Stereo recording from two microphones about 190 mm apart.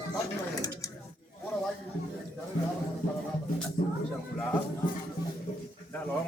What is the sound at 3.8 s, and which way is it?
Speech, 45° left (ahead or behind).